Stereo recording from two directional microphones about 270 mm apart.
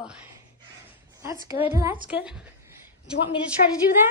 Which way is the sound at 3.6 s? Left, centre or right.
Left.